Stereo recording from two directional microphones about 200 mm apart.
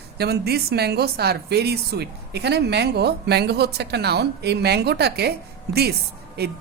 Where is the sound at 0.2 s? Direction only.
50° right (ahead or behind).